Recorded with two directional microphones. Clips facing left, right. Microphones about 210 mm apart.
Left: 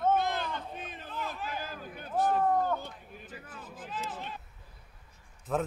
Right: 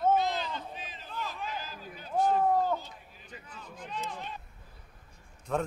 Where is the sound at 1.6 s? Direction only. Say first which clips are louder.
Left 2 dB; 55° left (ahead or behind).